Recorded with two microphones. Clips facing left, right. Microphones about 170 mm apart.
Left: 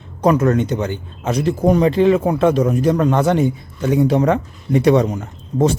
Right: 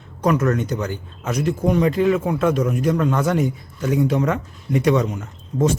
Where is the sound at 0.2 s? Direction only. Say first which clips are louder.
Left 4 dB; 30° left (ahead or behind).